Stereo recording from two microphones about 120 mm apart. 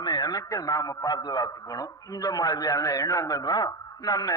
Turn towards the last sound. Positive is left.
turn(degrees=30)  # may be behind; listen again after turning